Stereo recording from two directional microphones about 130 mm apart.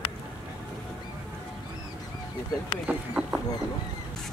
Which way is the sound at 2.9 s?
10° right (ahead or behind).